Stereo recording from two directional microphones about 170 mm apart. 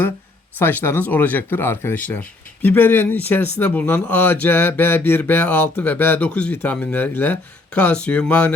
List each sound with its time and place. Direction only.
0.6 s speech: 10° left (ahead or behind)